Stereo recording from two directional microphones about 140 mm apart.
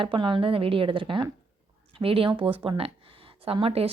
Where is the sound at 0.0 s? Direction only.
35° right (ahead or behind).